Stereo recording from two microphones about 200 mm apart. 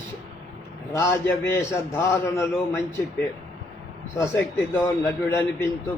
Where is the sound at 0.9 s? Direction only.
10° left (ahead or behind).